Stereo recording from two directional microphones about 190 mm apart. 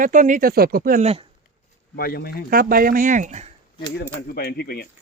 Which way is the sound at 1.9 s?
55° left (ahead or behind).